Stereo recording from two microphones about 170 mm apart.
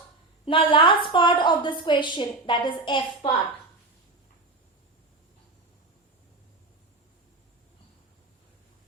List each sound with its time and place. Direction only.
0.4 s a woman's voice: 30° left (ahead or behind)